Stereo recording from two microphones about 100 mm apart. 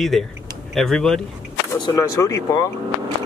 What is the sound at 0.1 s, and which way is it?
Speech, 5° left (ahead or behind).